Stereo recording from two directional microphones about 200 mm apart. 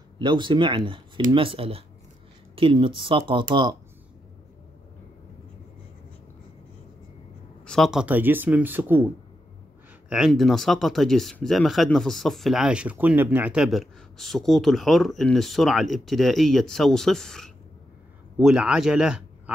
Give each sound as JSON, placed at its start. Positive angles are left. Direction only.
{"t": 0.2, "sound": "speech", "side_deg": -25}
{"t": 7.6, "sound": "speech", "side_deg": 0}